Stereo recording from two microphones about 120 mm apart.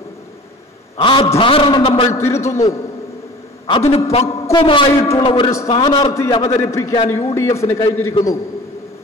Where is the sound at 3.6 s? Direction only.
50° left (ahead or behind).